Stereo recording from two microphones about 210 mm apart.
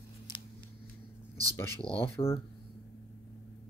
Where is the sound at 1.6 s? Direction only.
10° left (ahead or behind).